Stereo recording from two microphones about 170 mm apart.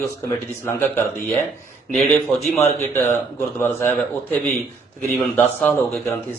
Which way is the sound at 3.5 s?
15° left (ahead or behind).